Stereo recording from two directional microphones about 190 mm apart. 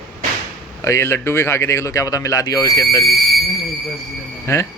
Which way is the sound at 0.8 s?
15° left (ahead or behind).